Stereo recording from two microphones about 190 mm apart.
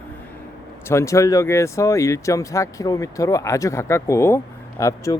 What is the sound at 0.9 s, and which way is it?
Speech, 15° left (ahead or behind).